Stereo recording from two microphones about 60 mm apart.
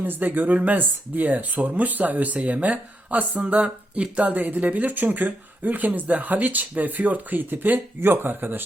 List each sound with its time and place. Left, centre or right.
0.0 s speech: right